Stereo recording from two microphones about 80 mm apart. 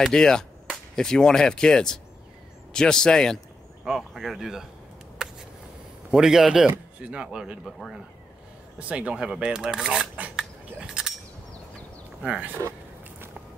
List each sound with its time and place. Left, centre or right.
0.0 s speech: centre
6.0 s speech: centre
12.2 s speech: centre